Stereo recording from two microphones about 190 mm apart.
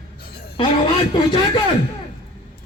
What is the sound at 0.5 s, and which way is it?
Speech, 30° left (ahead or behind).